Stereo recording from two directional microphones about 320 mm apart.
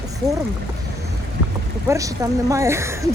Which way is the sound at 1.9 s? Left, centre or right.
Centre.